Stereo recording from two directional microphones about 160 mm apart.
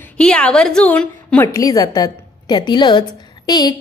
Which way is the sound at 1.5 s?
20° left (ahead or behind).